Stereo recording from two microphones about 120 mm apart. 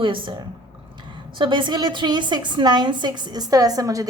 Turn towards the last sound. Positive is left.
turn(degrees=-30)  # may be behind; listen again after turning